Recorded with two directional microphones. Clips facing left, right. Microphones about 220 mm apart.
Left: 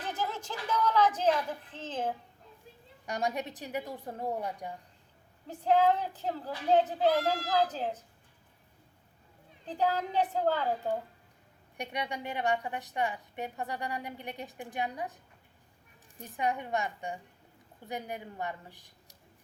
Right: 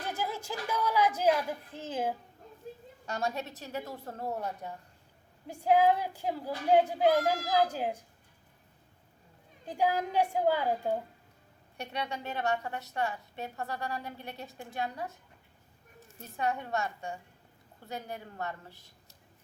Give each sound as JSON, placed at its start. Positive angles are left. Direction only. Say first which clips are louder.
{"t": 0.0, "sound": "a sound", "louder": "even", "side_deg": -10}
{"t": 2.6, "sound": "a sound", "louder": "right 13 dB", "side_deg": -45}
{"t": 3.1, "sound": "a woman's voice", "louder": "left 1 dB", "side_deg": 15}
{"t": 5.5, "sound": "a child's voice", "louder": "right 1 dB", "side_deg": -10}
{"t": 9.6, "sound": "a child's voice", "louder": "right 1 dB", "side_deg": -10}
{"t": 11.8, "sound": "a woman's voice", "louder": "left 1 dB", "side_deg": 15}